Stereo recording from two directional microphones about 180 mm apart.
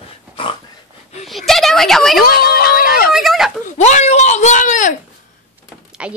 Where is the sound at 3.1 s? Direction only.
Centre (ahead or behind).